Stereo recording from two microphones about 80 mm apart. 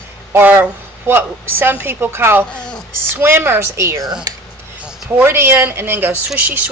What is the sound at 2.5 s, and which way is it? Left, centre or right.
Speech, centre.